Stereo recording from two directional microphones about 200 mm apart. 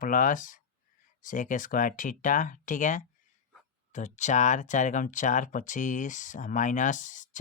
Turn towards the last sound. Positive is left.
turn(degrees=40)  # may be behind; listen again after turning